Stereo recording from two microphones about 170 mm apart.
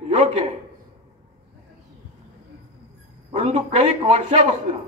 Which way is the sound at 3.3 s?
35° right (ahead or behind).